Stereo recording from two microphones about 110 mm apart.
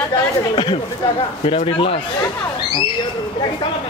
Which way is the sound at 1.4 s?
55° left (ahead or behind).